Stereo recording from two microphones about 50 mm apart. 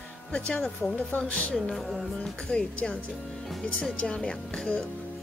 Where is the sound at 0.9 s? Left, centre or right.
Left.